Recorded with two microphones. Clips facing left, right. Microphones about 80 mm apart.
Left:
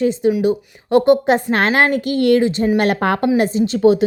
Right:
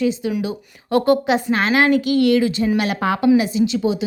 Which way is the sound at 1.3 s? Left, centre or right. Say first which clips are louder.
Left 2 dB; left.